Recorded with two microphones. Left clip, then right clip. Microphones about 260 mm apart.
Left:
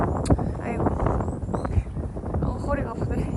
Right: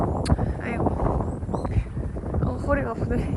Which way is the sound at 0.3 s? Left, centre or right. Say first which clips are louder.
Left 2 dB; centre.